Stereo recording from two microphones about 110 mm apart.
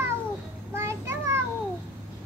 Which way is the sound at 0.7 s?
25° right (ahead or behind).